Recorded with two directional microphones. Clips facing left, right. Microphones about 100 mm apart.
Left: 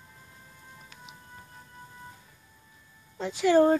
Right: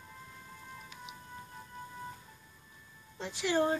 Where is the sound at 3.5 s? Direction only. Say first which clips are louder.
Left 9 dB; 50° left (ahead or behind).